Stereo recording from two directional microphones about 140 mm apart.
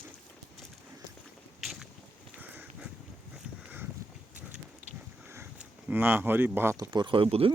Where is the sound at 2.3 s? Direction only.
10° right (ahead or behind).